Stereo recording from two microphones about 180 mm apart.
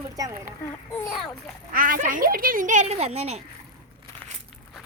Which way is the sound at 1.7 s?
50° right (ahead or behind).